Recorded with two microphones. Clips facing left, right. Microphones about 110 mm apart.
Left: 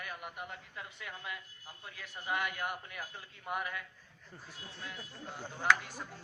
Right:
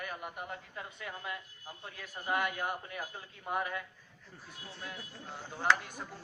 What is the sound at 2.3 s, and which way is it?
A man's voice, 40° right (ahead or behind).